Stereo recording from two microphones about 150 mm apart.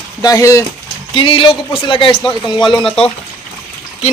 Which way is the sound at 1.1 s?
35° left (ahead or behind).